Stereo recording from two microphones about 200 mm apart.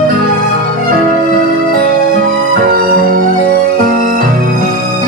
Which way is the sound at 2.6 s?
45° right (ahead or behind).